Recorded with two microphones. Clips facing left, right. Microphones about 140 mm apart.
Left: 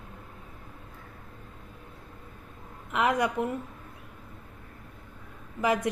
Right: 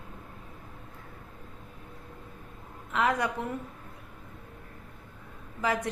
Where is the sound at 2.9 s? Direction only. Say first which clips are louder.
Left 2 dB; 15° left (ahead or behind).